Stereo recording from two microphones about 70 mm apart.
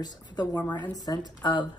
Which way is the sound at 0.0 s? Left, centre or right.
Left.